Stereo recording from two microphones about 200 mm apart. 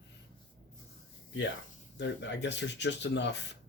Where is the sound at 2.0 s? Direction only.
60° left (ahead or behind).